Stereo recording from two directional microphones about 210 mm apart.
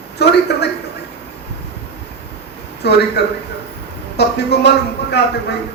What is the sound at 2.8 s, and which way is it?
A man's voice, 50° left (ahead or behind).